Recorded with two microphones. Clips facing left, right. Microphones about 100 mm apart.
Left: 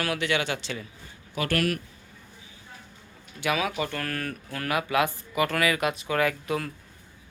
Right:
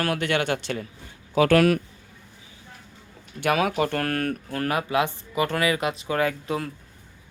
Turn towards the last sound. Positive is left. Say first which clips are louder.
# right 1 dB
turn(degrees=-25)  # may be behind; listen again after turning